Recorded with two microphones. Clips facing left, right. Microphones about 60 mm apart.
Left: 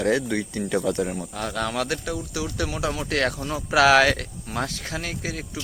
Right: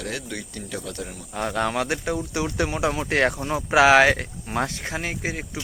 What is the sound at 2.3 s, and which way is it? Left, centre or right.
Speech, right.